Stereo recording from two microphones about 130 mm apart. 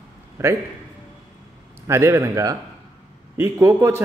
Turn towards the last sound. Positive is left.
turn(degrees=-20)  # may be behind; listen again after turning